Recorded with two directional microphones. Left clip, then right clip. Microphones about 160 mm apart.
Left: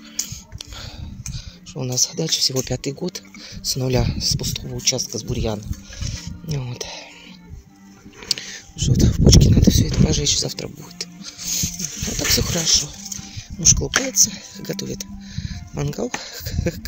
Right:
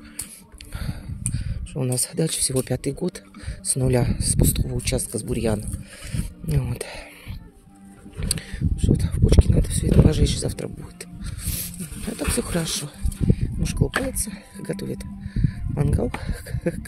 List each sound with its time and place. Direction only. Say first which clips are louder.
1.8 s speech: left 3 dB; 30° right (ahead or behind)
2.5 s speech: left 1 dB; 15° right (ahead or behind)
4.4 s speech: right 2 dB; 30° right (ahead or behind)
6.0 s music: left 2 dB; 25° right (ahead or behind)
8.5 s speech: right 1 dB; 5° right (ahead or behind)
10.0 s a sound: left 4 dB; 25° right (ahead or behind)
12.4 s speech: left 3 dB; 20° right (ahead or behind)
12.6 s speech: left 11 dB; 35° right (ahead or behind)
13.3 s speech: left 12 dB; 5° right (ahead or behind)